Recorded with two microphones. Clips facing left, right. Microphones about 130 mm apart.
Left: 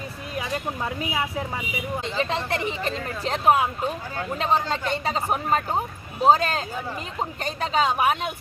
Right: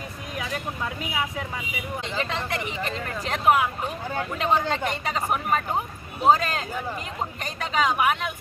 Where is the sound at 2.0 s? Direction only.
35° left (ahead or behind).